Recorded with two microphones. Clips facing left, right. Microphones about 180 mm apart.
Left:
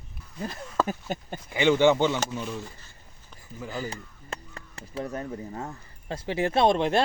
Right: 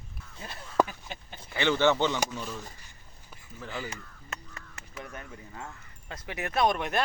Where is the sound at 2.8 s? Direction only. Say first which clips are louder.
Left 2 dB; 15° right (ahead or behind).